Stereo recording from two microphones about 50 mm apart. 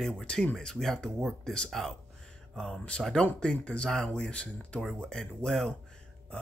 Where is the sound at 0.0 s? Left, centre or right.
Centre.